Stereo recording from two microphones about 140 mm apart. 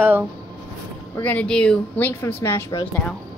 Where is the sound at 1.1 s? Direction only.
10° left (ahead or behind).